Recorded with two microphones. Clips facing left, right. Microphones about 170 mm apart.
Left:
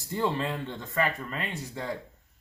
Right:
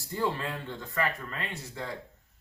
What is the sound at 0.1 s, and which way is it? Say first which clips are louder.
Speech: left 3 dB; 20° left (ahead or behind).